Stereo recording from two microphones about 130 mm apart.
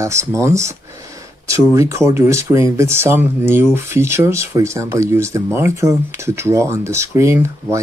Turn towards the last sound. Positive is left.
turn(degrees=-20)  # may be behind; listen again after turning